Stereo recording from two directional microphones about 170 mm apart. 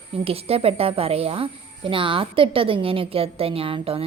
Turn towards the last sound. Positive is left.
turn(degrees=-35)  # may be behind; listen again after turning